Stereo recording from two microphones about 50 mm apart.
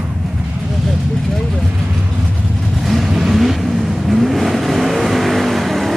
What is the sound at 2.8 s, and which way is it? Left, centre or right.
Vehicle, centre.